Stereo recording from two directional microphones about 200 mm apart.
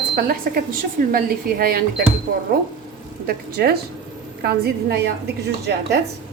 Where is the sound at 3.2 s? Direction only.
50° right (ahead or behind).